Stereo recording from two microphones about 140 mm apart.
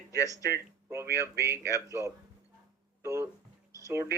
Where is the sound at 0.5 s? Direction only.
20° right (ahead or behind).